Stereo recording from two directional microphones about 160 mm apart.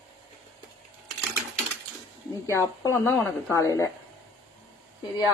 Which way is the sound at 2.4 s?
20° left (ahead or behind).